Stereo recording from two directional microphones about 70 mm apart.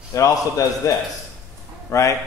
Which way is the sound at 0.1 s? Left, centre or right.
Left.